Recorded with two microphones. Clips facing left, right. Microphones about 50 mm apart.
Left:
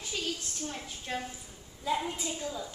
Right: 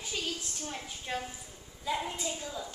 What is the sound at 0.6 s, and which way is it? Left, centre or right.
Speech, centre.